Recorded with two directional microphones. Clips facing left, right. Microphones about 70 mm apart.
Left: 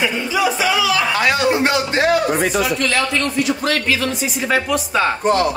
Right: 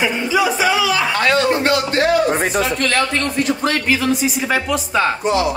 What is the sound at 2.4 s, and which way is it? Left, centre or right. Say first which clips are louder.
Speech: even; right.